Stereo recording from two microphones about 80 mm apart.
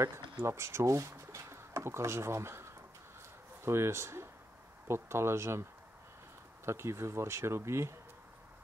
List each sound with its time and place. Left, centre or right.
0.4 s speech: right